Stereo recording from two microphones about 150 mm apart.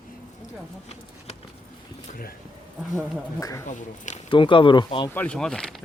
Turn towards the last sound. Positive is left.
turn(degrees=5)  # may be behind; listen again after turning